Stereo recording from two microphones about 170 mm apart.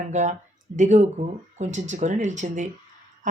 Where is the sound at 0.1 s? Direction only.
45° right (ahead or behind).